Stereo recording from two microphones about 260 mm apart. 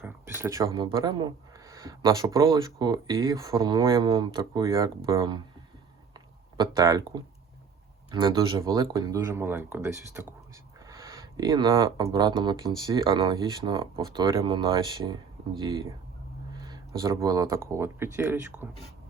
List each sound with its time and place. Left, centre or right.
0.0 s speech: centre
6.1 s a sound: centre
8.1 s speech: centre